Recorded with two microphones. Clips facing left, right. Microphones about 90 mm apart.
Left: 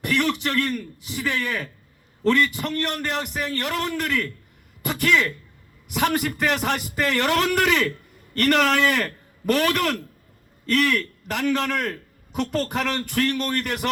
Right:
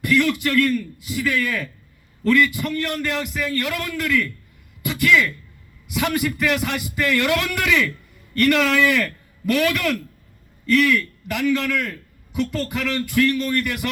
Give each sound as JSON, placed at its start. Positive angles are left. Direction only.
{"t": 0.0, "sound": "a man's voice", "side_deg": 30}
{"t": 4.8, "sound": "a sound", "side_deg": 35}
{"t": 5.9, "sound": "a man's voice", "side_deg": 40}